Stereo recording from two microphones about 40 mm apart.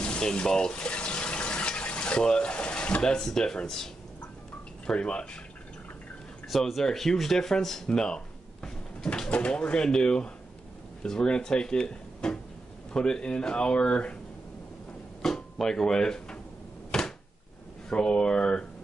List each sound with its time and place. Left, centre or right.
0.2 s water: centre
3.0 s speech: centre
4.8 s speech: left
6.8 s speech: centre
7.9 s speech: left
8.6 s a sound: centre
9.3 s speech: left
15.2 s speech: centre
16.9 s a sound: centre
17.8 s speech: left